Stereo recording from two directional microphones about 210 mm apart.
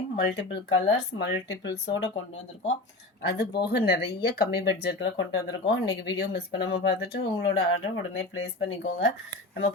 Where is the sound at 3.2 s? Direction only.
50° left (ahead or behind).